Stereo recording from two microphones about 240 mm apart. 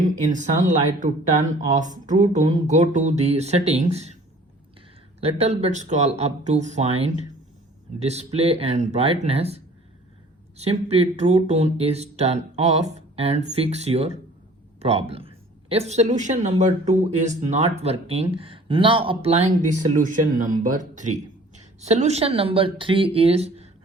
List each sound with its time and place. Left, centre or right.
0.0 s speech: right
5.2 s speech: right
10.6 s a woman's voice: right